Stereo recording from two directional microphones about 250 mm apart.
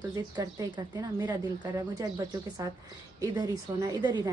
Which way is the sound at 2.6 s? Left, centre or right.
Centre.